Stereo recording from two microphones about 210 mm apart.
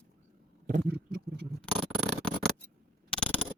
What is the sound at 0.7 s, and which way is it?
Wild animals, 45° right (ahead or behind).